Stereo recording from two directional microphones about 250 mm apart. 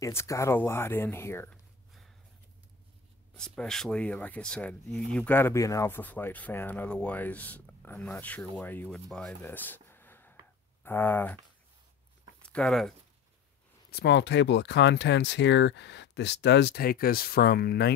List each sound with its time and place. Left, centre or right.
0.0 s speech: centre
3.3 s speech: centre
12.4 s speech: centre
13.8 s speech: left